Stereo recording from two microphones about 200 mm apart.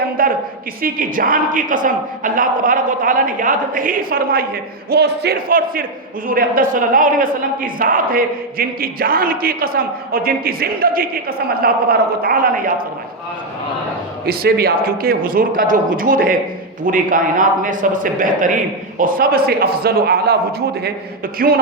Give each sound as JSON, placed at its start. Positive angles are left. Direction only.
{"t": 0.2, "sound": "a sound", "side_deg": -45}
{"t": 0.8, "sound": "a man's voice", "side_deg": -45}
{"t": 14.3, "sound": "a man's voice", "side_deg": -50}